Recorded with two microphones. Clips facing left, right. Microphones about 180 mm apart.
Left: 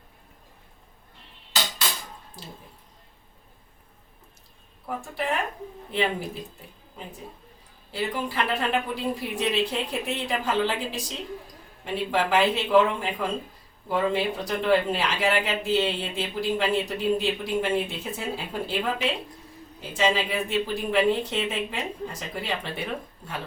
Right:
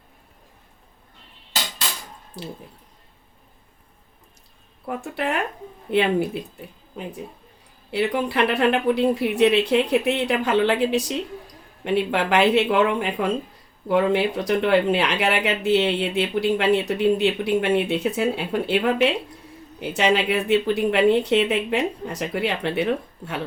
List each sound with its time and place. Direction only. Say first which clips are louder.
4.9 s speech: right 3 dB; 70° right (ahead or behind)
7.9 s speech: right 7 dB; 70° right (ahead or behind)